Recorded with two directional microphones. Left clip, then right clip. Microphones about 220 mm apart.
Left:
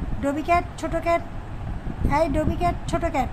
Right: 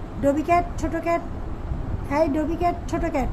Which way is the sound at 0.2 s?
20° left (ahead or behind).